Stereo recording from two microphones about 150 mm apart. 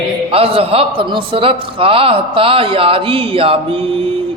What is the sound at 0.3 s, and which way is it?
A man's voice, 40° right (ahead or behind).